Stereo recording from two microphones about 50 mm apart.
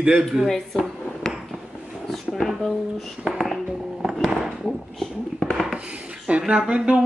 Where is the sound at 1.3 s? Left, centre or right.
Centre.